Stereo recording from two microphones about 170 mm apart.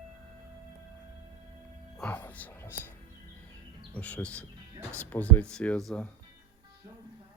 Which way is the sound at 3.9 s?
10° left (ahead or behind).